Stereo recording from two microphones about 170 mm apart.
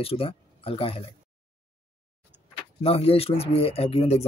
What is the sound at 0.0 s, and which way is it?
Speech, 35° left (ahead or behind).